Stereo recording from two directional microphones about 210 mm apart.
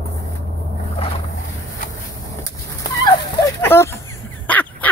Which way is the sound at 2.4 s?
20° left (ahead or behind).